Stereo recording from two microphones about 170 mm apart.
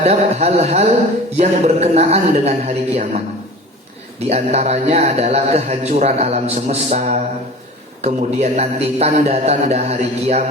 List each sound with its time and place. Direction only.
0.0 s a man's voice: 40° right (ahead or behind)
4.3 s a man's voice: 40° right (ahead or behind)